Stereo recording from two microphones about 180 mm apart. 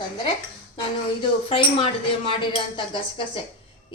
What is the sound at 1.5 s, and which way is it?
Speech, 30° left (ahead or behind).